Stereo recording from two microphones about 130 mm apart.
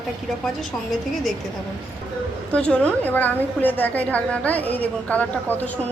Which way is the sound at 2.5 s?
10° left (ahead or behind).